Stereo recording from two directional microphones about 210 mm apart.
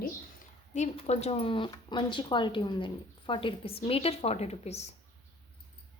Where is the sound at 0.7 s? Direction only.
35° left (ahead or behind).